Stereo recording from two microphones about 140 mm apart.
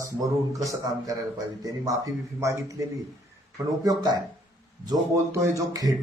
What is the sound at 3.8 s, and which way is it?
A man's voice, 25° right (ahead or behind).